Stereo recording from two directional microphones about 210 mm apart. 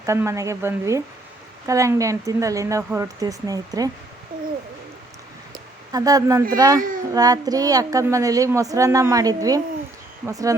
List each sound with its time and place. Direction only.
0.0 s a woman's voice: 15° right (ahead or behind)
5.9 s a woman's voice: 15° right (ahead or behind)